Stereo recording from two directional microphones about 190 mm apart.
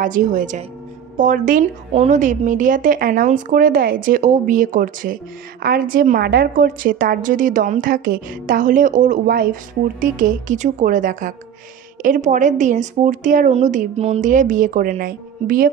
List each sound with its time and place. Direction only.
0.0 s speech: 45° right (ahead or behind)